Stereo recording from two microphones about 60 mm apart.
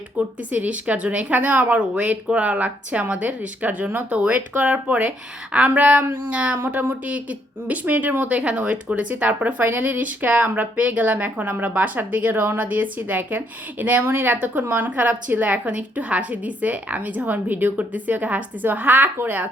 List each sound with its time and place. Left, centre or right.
0.2 s speech: right